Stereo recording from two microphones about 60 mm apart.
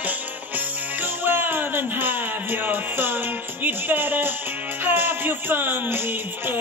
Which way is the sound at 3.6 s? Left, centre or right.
Right.